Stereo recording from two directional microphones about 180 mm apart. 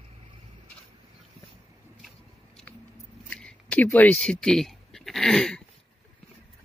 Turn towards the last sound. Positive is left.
turn(degrees=5)  # may be behind; listen again after turning